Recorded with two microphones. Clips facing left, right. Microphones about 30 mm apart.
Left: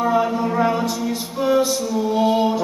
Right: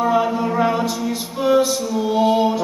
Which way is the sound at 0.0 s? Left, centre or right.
Centre.